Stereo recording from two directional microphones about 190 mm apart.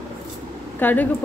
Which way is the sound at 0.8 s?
10° left (ahead or behind).